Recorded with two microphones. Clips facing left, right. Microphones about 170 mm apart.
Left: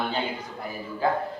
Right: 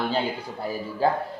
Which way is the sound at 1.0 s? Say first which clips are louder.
Right 2 dB; 30° right (ahead or behind).